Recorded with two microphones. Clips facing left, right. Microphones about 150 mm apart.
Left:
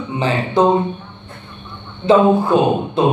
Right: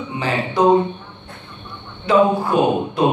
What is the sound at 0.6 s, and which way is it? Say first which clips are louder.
Speech: left 1 dB; 25° left (ahead or behind).